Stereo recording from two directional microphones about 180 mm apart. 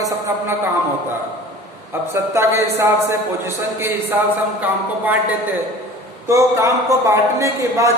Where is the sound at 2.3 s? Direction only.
15° right (ahead or behind).